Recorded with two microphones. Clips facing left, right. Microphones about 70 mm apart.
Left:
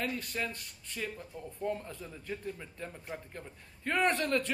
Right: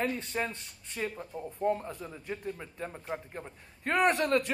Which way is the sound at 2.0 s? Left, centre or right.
Centre.